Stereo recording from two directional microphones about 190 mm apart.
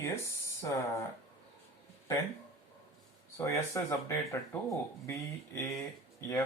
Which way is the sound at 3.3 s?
15° left (ahead or behind).